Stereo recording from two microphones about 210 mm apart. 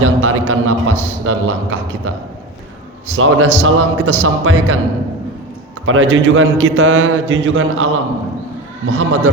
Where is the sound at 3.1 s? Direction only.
70° right (ahead or behind).